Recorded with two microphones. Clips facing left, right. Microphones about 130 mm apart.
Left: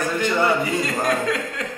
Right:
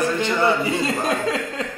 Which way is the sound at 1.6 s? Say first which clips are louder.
Right 1 dB; 30° right (ahead or behind).